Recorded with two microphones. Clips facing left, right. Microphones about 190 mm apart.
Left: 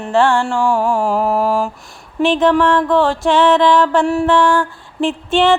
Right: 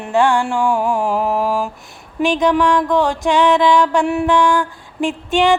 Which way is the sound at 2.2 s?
15° right (ahead or behind).